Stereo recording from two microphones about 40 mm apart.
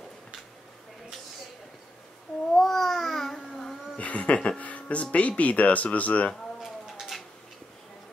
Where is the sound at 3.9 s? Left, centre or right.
Left.